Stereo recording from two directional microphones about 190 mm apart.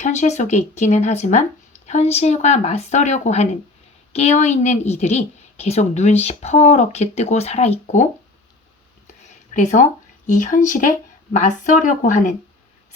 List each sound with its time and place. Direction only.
0.0 s a woman's voice: 35° left (ahead or behind)
9.5 s a woman's voice: 40° left (ahead or behind)